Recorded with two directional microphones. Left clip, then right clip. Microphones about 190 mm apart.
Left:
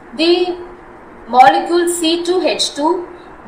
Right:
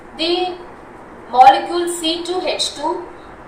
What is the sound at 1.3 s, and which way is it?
A woman's voice, 25° left (ahead or behind).